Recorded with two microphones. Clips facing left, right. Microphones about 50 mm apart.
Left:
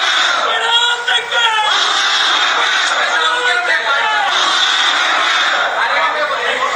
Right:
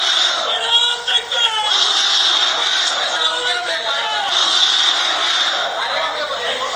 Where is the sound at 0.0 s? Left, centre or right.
Left.